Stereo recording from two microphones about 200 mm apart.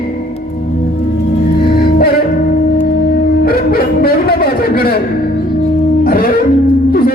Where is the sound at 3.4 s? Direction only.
50° left (ahead or behind).